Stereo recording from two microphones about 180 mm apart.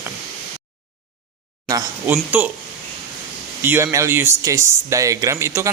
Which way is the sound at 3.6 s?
10° right (ahead or behind).